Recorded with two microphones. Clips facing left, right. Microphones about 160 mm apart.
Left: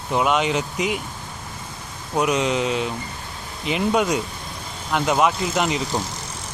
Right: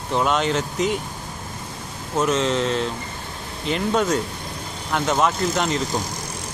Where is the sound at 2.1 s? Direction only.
10° left (ahead or behind).